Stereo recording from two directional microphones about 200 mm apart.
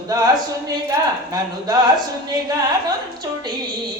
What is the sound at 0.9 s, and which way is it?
Speech, 20° right (ahead or behind).